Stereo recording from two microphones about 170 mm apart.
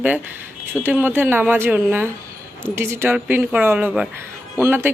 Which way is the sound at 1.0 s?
10° right (ahead or behind).